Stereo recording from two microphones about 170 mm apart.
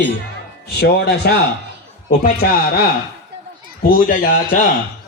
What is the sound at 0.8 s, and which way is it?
Speech, 70° left (ahead or behind).